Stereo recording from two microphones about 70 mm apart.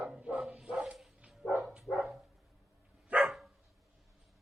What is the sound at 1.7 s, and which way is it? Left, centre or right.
Dog, centre.